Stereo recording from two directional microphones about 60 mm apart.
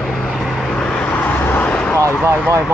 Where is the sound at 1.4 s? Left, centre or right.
Left.